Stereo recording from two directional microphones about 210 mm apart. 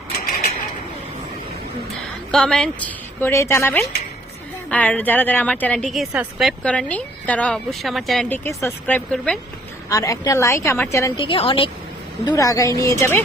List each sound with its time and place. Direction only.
2.3 s a woman's voice: 5° left (ahead or behind)
9.9 s a woman's voice: 15° left (ahead or behind)